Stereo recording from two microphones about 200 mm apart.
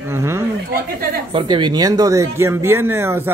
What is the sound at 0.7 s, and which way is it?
Speech, 50° right (ahead or behind).